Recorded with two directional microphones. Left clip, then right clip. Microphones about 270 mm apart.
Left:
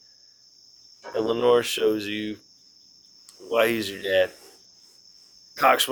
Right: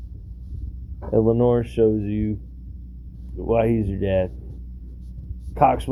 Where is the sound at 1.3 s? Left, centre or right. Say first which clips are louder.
Left 4 dB; centre.